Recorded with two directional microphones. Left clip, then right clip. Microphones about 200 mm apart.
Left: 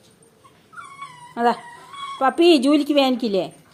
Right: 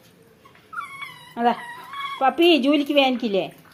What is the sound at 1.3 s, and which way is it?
Speech, 25° left (ahead or behind).